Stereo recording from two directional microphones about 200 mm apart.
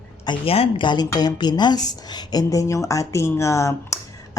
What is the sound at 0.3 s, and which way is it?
Speech, 30° left (ahead or behind).